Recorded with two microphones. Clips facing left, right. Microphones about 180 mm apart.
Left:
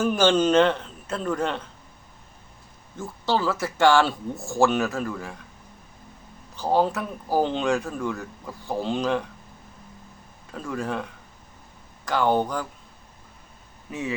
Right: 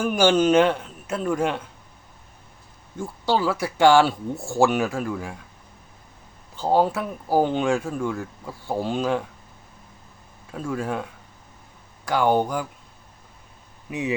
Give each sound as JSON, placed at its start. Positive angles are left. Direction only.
{"t": 0.0, "sound": "a man's voice", "side_deg": -10}
{"t": 3.0, "sound": "a man's voice", "side_deg": -15}
{"t": 6.6, "sound": "a man's voice", "side_deg": -15}
{"t": 8.1, "sound": "speech", "side_deg": 0}
{"t": 8.6, "sound": "a man's voice", "side_deg": -10}
{"t": 10.5, "sound": "a man's voice", "side_deg": -10}
{"t": 13.9, "sound": "a man's voice", "side_deg": -15}